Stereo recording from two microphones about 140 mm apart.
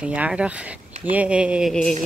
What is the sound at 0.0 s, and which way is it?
Speech, 10° right (ahead or behind).